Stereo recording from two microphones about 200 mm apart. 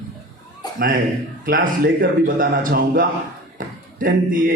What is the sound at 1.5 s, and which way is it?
A man's voice, 50° right (ahead or behind).